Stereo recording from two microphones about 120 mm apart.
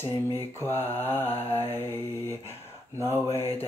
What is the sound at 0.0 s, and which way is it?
Mantra, 20° left (ahead or behind).